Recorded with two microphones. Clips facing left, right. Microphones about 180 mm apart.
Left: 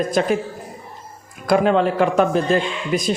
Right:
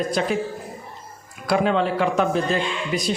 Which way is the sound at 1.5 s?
50° left (ahead or behind).